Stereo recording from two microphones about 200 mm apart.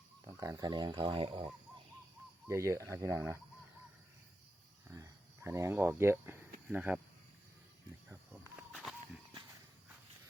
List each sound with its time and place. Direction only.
0.3 s speech: 15° right (ahead or behind)
2.5 s speech: 15° right (ahead or behind)
4.9 s speech: 15° right (ahead or behind)
8.1 s a sound: 10° right (ahead or behind)
8.7 s walk: centre (ahead or behind)